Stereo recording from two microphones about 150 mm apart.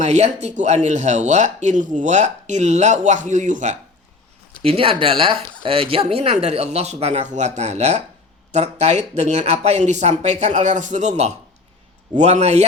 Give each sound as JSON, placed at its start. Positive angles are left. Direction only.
{"t": 0.0, "sound": "speech", "side_deg": -50}
{"t": 4.6, "sound": "speech", "side_deg": -40}